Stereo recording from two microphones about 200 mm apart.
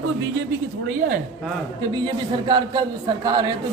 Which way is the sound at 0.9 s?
40° right (ahead or behind).